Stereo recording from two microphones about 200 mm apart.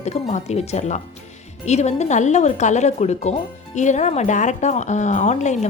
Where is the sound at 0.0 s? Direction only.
35° left (ahead or behind).